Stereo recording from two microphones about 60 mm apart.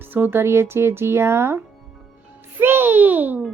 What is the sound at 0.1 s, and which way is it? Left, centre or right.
A child's voice, right.